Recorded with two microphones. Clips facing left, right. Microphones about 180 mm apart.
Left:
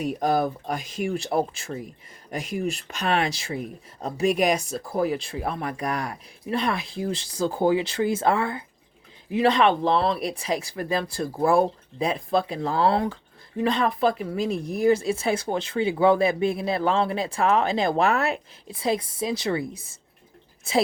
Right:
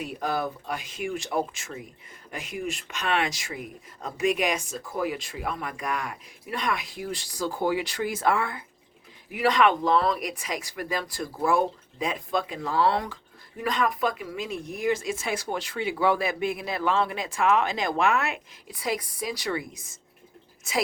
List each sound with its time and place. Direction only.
0.0 s speech: 40° left (ahead or behind)